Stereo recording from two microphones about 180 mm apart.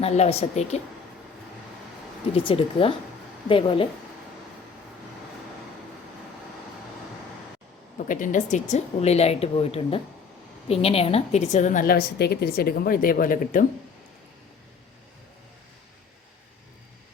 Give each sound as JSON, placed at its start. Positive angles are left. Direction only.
{"t": 0.0, "sound": "speech", "side_deg": 35}
{"t": 2.3, "sound": "a woman's voice", "side_deg": 30}
{"t": 7.9, "sound": "a woman's voice", "side_deg": 45}